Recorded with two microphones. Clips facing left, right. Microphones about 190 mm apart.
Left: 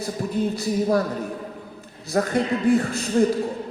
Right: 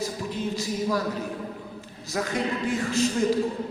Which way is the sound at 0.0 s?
55° left (ahead or behind).